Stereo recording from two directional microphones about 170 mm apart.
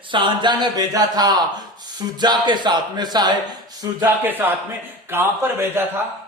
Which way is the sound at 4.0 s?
10° right (ahead or behind).